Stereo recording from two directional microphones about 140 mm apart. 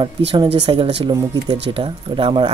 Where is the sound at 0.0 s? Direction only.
40° right (ahead or behind).